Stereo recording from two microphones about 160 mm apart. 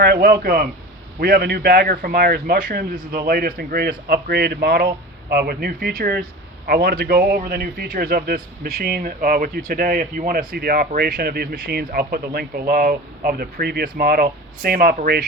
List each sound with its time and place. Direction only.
0.0 s speech: 80° right; by 0.7 s 65° right (ahead or behind)
1.2 s speech: 80° right